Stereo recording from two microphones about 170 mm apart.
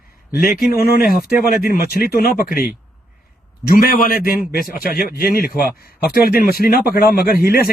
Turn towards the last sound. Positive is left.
turn(degrees=60)  # may be behind; listen again after turning